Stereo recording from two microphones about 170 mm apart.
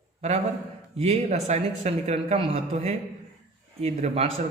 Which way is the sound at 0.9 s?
40° right (ahead or behind).